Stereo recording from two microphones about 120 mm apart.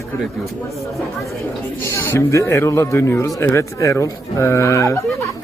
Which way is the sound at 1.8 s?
20° left (ahead or behind).